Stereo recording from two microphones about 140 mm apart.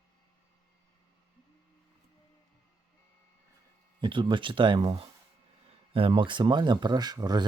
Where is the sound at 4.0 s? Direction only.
35° right (ahead or behind).